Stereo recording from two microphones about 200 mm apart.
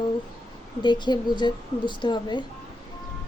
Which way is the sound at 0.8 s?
20° left (ahead or behind).